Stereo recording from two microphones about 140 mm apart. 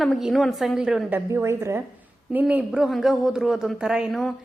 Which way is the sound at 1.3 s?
20° right (ahead or behind).